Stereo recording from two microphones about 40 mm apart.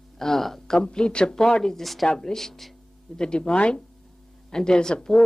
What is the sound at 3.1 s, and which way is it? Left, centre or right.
A woman's voice, left.